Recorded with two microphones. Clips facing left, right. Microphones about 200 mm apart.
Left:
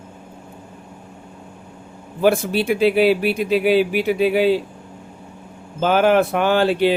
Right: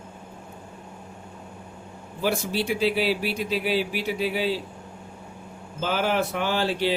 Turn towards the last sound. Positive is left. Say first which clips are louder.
# left 8 dB
turn(degrees=60)  # may be behind; listen again after turning